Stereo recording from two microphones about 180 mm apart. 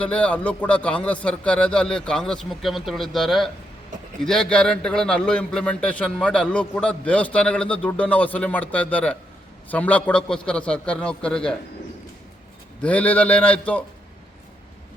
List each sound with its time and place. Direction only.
0.0 s a man's voice: 5° left (ahead or behind)
12.8 s a man's voice: 5° left (ahead or behind)